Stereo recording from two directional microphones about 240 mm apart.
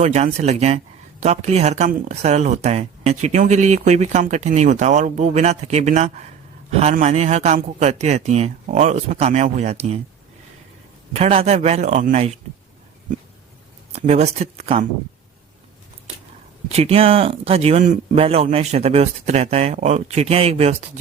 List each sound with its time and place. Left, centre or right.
0.0 s speech: right
11.1 s speech: right
13.9 s speech: right
16.6 s speech: right